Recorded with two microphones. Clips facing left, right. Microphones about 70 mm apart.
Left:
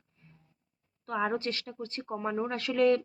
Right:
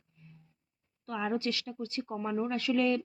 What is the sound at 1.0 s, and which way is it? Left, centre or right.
Speech, left.